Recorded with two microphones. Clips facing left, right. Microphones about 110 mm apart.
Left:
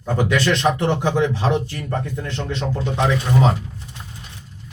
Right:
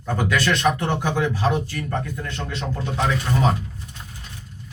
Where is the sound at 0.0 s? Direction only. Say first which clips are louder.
Left 3 dB; 20° left (ahead or behind).